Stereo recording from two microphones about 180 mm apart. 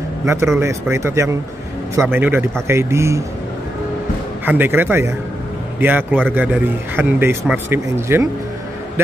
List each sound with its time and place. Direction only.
0.2 s speech: 15° right (ahead or behind)
4.5 s a man's voice: 10° right (ahead or behind)